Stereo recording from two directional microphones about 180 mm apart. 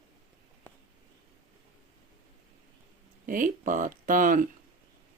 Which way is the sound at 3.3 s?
50° right (ahead or behind).